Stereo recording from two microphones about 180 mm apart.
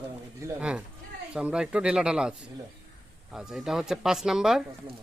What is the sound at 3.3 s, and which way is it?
Speech, centre (ahead or behind).